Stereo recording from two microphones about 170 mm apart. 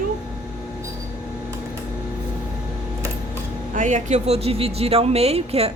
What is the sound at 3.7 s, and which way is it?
Speech, 45° right (ahead or behind).